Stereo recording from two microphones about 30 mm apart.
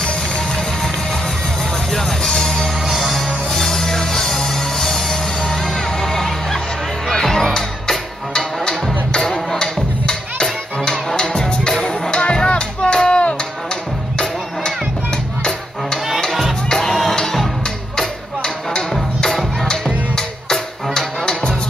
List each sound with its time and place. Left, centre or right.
1.9 s music: centre
17.1 s music: centre
18.7 s music: left